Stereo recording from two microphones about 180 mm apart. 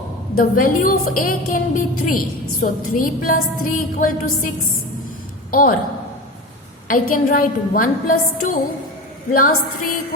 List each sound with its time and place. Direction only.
0.3 s a woman's voice: 50° left (ahead or behind)
6.8 s a woman's voice: 50° left (ahead or behind)